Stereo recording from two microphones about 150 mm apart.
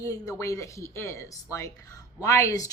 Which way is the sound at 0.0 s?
20° left (ahead or behind).